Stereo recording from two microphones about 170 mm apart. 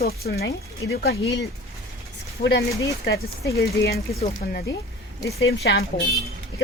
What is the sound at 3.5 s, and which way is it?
A woman's voice, 65° left (ahead or behind).